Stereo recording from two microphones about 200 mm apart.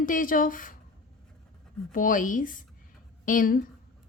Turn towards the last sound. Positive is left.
turn(degrees=40)  # may be behind; listen again after turning